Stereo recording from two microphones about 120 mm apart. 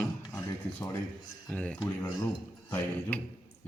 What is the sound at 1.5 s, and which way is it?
Speech, 10° left (ahead or behind).